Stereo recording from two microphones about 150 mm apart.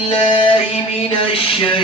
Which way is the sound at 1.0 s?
35° left (ahead or behind).